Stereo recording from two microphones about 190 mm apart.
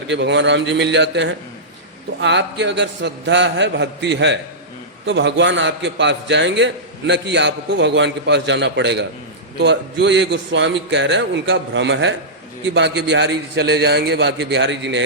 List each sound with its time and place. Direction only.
0.1 s a man's voice: 70° right (ahead or behind)